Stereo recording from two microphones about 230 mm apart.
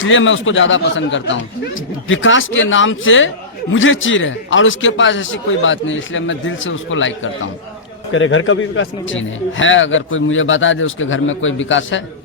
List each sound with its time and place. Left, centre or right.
0.0 s a man's voice: left
8.1 s a man's voice: left